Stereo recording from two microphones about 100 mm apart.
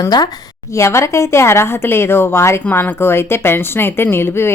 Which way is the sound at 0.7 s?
30° left (ahead or behind).